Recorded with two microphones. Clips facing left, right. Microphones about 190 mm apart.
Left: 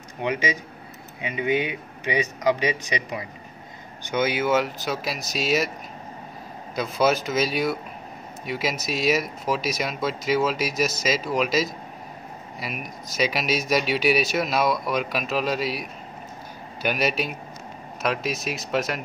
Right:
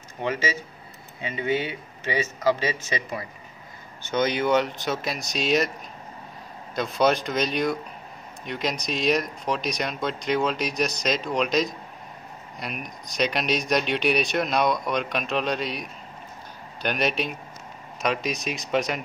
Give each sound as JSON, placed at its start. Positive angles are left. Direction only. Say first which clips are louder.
{"t": 0.2, "sound": "speech", "louder": "left 1 dB", "side_deg": 15}
{"t": 6.7, "sound": "speech", "louder": "even", "side_deg": 5}